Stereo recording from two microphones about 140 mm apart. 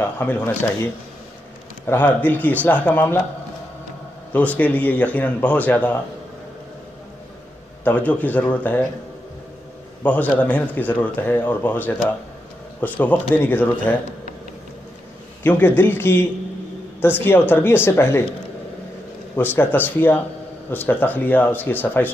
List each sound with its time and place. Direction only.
0.0 s speech: 15° left (ahead or behind)
1.9 s speech: 15° left (ahead or behind)
4.3 s speech: 10° left (ahead or behind)
7.8 s speech: 10° left (ahead or behind)
10.0 s speech: 10° left (ahead or behind)
15.4 s speech: 15° left (ahead or behind)
19.3 s speech: 15° left (ahead or behind)